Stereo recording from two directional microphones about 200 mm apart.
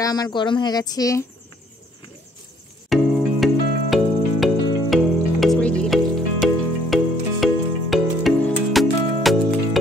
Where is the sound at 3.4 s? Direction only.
Centre (ahead or behind).